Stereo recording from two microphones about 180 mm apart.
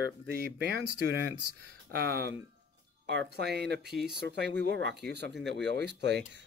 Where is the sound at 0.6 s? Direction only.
60° right (ahead or behind).